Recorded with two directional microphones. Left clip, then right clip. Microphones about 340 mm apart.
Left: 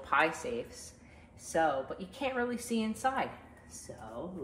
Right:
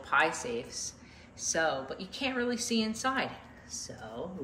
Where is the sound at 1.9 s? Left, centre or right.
Centre.